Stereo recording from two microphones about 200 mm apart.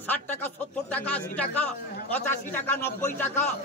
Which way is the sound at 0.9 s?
5° left (ahead or behind).